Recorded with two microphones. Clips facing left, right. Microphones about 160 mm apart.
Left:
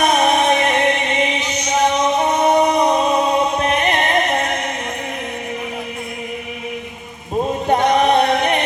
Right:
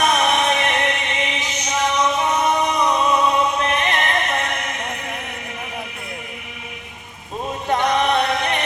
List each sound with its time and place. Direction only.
0.1 s music: 35° left (ahead or behind)
7.7 s chant: 35° left (ahead or behind)